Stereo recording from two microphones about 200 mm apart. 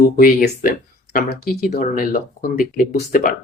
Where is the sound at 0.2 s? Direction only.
45° left (ahead or behind).